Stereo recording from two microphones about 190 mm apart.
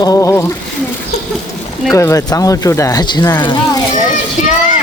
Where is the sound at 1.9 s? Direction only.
15° left (ahead or behind).